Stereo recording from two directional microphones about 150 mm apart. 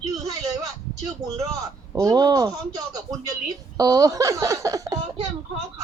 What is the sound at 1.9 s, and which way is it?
Speech, 25° right (ahead or behind).